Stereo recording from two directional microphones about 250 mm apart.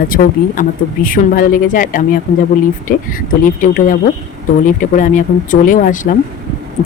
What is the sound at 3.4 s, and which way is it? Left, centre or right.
Speech, left.